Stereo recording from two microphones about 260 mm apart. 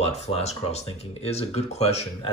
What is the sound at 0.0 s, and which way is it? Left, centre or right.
Speech, left.